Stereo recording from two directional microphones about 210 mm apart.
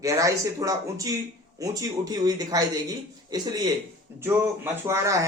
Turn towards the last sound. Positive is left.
turn(degrees=-15)  # may be behind; listen again after turning